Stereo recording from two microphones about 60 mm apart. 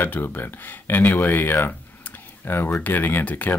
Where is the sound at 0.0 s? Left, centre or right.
Left.